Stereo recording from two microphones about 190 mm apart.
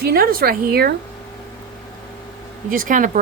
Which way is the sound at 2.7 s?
45° right (ahead or behind).